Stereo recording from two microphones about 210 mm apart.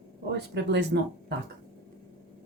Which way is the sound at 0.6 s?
55° right (ahead or behind).